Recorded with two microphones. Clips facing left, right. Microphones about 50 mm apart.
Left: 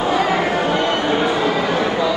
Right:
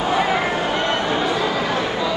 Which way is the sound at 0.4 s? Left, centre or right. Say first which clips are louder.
Left 3 dB; left.